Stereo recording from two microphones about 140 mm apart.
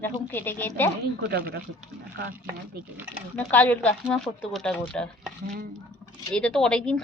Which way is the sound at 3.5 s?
10° left (ahead or behind).